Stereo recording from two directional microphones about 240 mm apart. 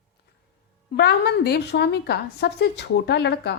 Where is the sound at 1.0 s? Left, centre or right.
Left.